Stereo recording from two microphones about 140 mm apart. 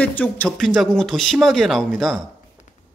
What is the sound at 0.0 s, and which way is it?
A man's voice, 10° left (ahead or behind).